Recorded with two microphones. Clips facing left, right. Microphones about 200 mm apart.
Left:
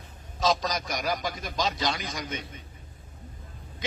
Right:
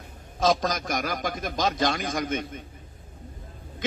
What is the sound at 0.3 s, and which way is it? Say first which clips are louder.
A man's voice: right 3 dB; 50° right (ahead or behind).